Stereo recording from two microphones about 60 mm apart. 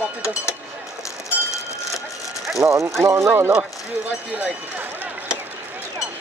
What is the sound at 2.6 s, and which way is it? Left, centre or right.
Speech, right.